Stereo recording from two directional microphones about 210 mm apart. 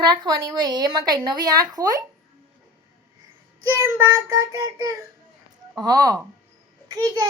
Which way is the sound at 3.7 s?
15° right (ahead or behind).